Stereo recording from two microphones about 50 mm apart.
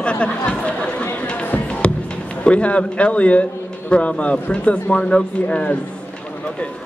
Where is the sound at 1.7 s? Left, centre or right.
Left.